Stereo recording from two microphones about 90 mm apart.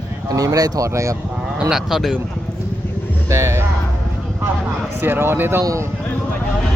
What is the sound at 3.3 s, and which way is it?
Speech, 35° right (ahead or behind).